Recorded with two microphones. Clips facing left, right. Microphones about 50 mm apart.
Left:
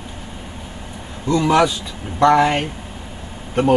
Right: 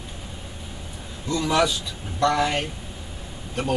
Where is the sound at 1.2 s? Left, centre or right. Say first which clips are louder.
Left 7 dB; left.